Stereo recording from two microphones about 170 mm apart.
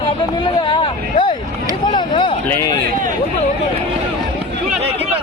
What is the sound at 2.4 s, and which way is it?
Speech, 15° left (ahead or behind).